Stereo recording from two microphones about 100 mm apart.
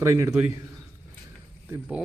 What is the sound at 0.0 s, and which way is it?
Speech, 30° right (ahead or behind).